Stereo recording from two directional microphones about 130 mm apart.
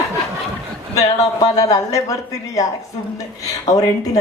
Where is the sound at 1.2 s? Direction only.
25° left (ahead or behind).